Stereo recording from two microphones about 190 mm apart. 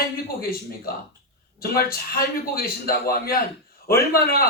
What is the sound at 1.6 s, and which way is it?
A man's voice, 50° left (ahead or behind).